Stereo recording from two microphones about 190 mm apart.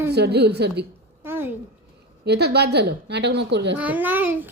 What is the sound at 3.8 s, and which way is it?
Speech, 10° right (ahead or behind).